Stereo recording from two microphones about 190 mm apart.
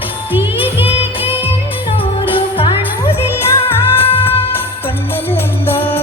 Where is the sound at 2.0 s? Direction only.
30° left (ahead or behind).